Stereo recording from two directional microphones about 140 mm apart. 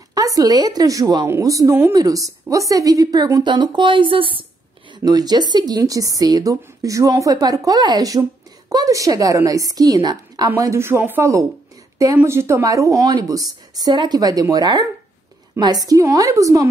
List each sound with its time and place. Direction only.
0.1 s a woman's voice: 25° right (ahead or behind)